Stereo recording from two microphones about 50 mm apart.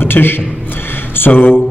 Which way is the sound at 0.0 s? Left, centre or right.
Left.